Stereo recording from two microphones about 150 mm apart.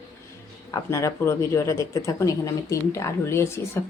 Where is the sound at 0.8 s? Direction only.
20° left (ahead or behind).